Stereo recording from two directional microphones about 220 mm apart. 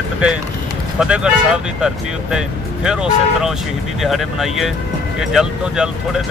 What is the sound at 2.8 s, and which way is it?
Speech, 5° right (ahead or behind).